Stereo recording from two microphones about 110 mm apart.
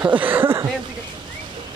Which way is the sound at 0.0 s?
15° right (ahead or behind).